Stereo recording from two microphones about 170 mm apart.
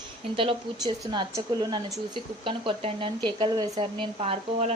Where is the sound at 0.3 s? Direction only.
30° right (ahead or behind).